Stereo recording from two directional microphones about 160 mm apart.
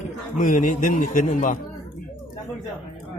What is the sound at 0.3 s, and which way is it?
A man's voice, 55° left (ahead or behind).